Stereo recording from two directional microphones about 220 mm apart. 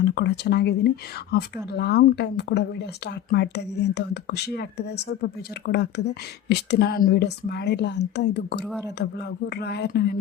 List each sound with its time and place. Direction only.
0.0 s speech: 50° left (ahead or behind)